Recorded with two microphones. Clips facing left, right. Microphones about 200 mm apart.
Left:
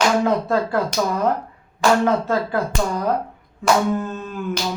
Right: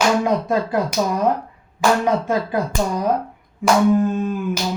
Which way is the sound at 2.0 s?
15° right (ahead or behind).